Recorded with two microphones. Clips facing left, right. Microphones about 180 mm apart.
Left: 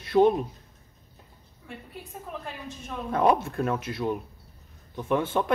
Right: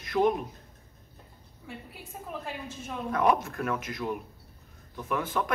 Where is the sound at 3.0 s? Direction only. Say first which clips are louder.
Left 3 dB; 30° left (ahead or behind).